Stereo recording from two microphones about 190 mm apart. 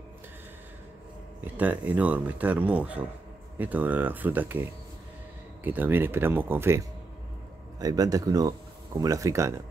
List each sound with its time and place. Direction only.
1.6 s speech: 10° right (ahead or behind)
7.8 s speech: 20° right (ahead or behind)